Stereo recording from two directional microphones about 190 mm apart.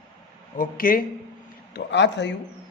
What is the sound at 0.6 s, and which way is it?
Speech, 50° left (ahead or behind).